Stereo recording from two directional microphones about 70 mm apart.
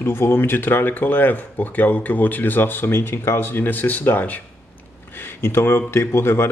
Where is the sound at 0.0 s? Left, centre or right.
Left.